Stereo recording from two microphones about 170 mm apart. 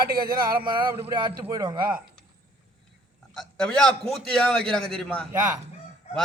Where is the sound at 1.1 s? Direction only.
25° right (ahead or behind).